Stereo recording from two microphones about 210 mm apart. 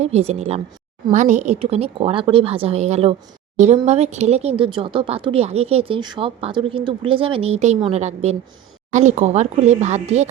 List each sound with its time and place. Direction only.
0.0 s speech: 30° right (ahead or behind)